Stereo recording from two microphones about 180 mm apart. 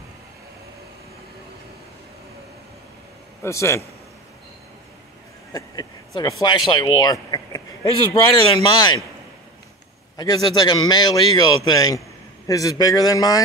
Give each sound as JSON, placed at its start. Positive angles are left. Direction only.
{"t": 3.4, "sound": "a man's voice", "side_deg": 15}
{"t": 5.5, "sound": "a sound", "side_deg": 20}
{"t": 6.4, "sound": "a man's voice", "side_deg": 25}
{"t": 10.1, "sound": "a man's voice", "side_deg": 20}